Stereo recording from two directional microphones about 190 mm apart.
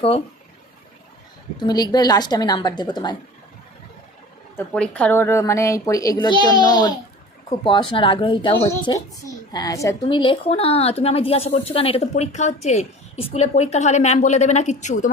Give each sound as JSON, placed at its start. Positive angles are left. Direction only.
{"t": 1.5, "sound": "a woman's voice", "side_deg": 20}
{"t": 4.5, "sound": "a woman's voice", "side_deg": 5}
{"t": 8.5, "sound": "a woman's voice", "side_deg": 15}